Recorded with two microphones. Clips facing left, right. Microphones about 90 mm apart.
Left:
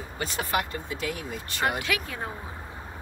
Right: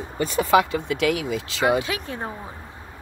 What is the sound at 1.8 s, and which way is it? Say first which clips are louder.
Speech: right 3 dB; 30° right (ahead or behind).